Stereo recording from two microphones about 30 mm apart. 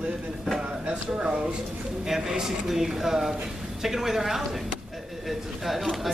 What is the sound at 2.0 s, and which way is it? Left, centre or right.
A woman's voice, centre.